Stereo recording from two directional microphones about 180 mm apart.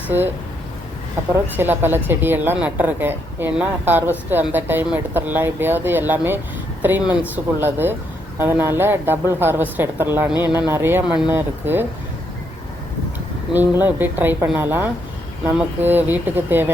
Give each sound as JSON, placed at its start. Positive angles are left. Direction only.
{"t": 1.5, "sound": "speech", "side_deg": -10}
{"t": 13.5, "sound": "speech", "side_deg": 0}